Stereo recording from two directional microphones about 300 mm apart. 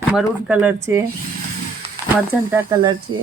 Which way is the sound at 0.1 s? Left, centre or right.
Centre.